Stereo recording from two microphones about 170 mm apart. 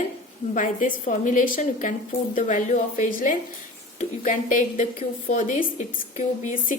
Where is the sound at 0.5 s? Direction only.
50° left (ahead or behind).